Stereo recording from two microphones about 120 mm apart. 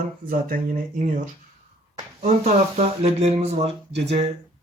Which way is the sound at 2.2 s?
70° right (ahead or behind).